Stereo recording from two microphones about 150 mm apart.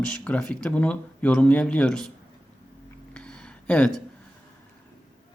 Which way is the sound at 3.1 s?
5° left (ahead or behind).